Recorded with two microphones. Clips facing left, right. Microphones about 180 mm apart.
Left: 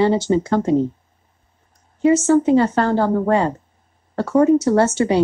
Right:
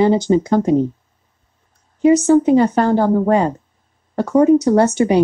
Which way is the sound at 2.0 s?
15° right (ahead or behind).